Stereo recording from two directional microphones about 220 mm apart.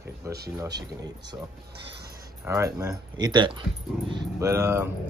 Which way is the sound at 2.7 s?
15° right (ahead or behind).